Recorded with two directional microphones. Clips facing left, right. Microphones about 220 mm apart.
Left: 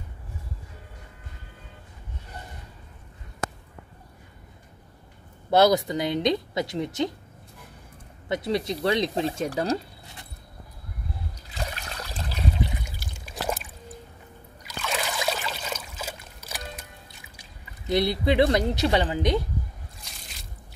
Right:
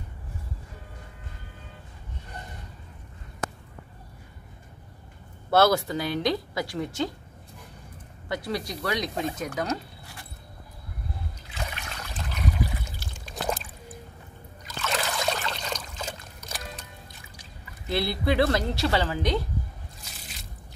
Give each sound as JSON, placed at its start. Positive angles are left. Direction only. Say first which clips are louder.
{"t": 5.5, "sound": "a woman's voice", "louder": "left 2 dB", "side_deg": 15}
{"t": 8.3, "sound": "a woman's voice", "louder": "left 4 dB", "side_deg": 20}
{"t": 11.4, "sound": "water", "louder": "left 2 dB", "side_deg": 35}
{"t": 12.8, "sound": "water", "louder": "even", "side_deg": 10}
{"t": 14.9, "sound": "trickle", "louder": "even", "side_deg": 5}
{"t": 17.4, "sound": "speech", "louder": "right 1 dB", "side_deg": 20}
{"t": 20.1, "sound": "squish", "louder": "right 1 dB", "side_deg": 0}